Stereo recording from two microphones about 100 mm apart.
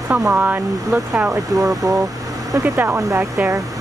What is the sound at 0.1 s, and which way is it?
Speech, 15° right (ahead or behind).